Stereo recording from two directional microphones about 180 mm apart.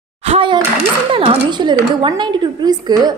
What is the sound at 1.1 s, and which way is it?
A woman's voice, 30° right (ahead or behind).